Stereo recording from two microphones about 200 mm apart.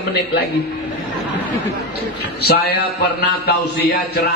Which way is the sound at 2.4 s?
55° left (ahead or behind).